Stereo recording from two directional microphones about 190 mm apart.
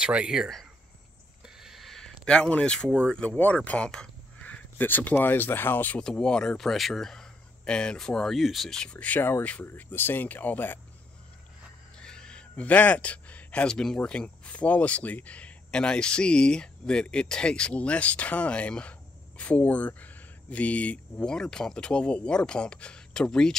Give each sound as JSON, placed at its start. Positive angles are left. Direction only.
{"t": 0.0, "sound": "speech", "side_deg": -5}
{"t": 1.4, "sound": "a sound", "side_deg": 0}
{"t": 3.1, "sound": "speech", "side_deg": 5}
{"t": 12.0, "sound": "speech", "side_deg": 5}